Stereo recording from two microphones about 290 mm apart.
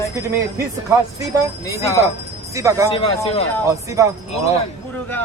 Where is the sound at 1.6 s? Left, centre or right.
Centre.